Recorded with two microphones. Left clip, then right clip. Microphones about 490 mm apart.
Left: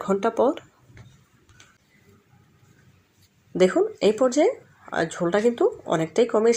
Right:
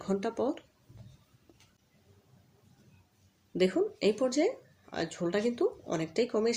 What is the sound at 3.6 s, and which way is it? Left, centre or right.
Speech, left.